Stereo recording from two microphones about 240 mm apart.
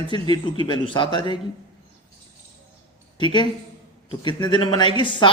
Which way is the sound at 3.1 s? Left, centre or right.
Centre.